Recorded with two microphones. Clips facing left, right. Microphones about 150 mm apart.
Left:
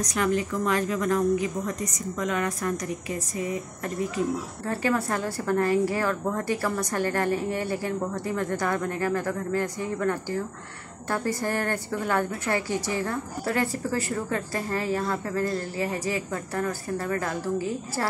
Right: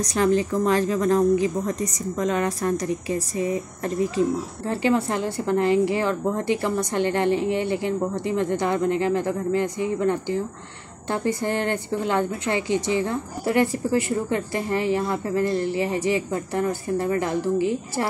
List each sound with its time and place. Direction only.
0.0 s a woman's voice: 30° right (ahead or behind)
4.6 s a woman's voice: 25° right (ahead or behind)